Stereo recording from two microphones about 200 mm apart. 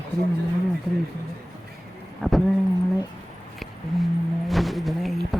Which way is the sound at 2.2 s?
Centre (ahead or behind).